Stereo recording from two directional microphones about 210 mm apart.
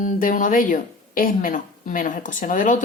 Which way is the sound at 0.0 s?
40° left (ahead or behind).